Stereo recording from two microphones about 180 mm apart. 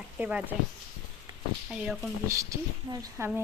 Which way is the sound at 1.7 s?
5° right (ahead or behind).